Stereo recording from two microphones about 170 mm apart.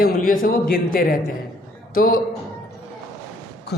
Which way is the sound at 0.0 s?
55° left (ahead or behind).